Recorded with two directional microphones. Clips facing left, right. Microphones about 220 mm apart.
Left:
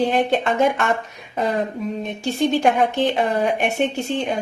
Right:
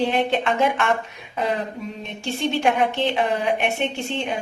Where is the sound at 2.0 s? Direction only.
40° left (ahead or behind).